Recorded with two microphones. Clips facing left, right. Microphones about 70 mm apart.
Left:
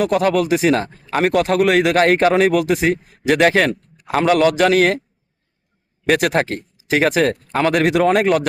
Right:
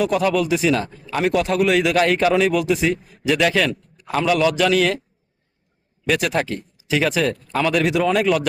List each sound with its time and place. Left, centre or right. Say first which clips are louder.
0.0 s a man's voice: left 2 dB; left
6.1 s a man's voice: left 4 dB; left